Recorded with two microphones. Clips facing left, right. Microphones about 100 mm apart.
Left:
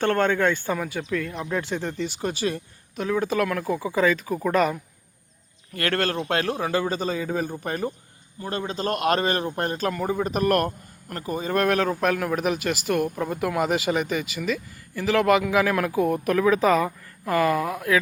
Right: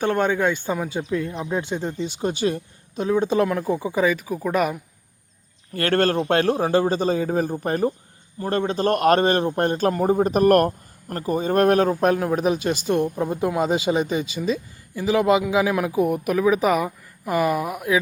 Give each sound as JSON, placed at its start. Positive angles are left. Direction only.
{"t": 0.0, "sound": "speech", "side_deg": -15}
{"t": 5.7, "sound": "a man's voice", "side_deg": -30}
{"t": 14.9, "sound": "speech", "side_deg": -15}